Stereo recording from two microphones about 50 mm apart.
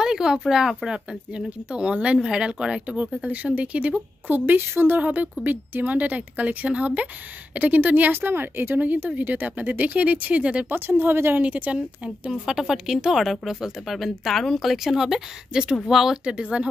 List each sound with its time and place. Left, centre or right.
0.0 s speech: centre
0.9 s speech: centre
3.2 s speech: right
10.7 s speech: right
11.3 s speech: right
12.3 s speech: centre
16.3 s speech: centre